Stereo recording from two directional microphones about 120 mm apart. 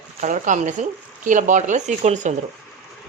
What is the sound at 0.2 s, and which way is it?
Speech, 90° right.